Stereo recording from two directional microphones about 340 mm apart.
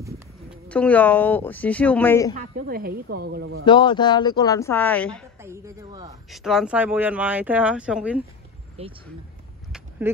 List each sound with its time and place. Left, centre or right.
0.7 s speech: centre
2.3 s speech: right
3.6 s speech: centre
5.4 s speech: centre
8.8 s speech: centre
9.7 s a sound: centre